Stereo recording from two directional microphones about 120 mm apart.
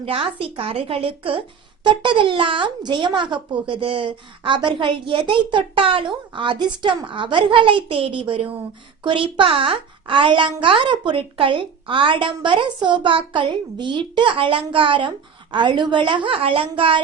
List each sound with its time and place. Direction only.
0.0 s a child's voice: 50° right (ahead or behind)